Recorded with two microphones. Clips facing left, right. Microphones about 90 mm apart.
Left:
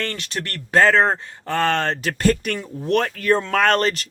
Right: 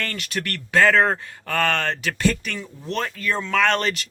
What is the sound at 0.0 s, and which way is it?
A man's voice, 25° left (ahead or behind).